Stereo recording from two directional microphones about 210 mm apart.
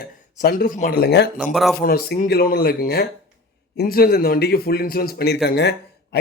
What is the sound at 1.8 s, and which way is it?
A man's voice, 45° left (ahead or behind).